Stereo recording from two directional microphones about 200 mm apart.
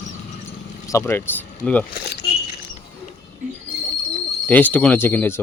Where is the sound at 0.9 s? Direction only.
15° left (ahead or behind).